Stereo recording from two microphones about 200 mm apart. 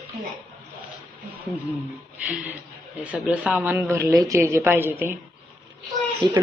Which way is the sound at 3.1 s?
5° right (ahead or behind).